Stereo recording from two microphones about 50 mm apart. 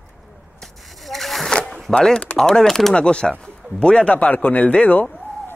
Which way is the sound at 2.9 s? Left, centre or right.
Centre.